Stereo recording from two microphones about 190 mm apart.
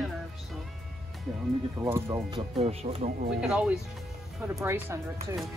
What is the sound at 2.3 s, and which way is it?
Speech, 30° right (ahead or behind).